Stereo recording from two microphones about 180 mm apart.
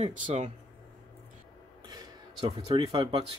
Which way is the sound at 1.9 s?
30° right (ahead or behind).